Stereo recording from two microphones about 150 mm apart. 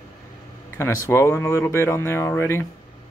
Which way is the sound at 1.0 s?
20° left (ahead or behind).